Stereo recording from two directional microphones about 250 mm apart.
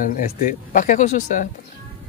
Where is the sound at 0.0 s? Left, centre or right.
Left.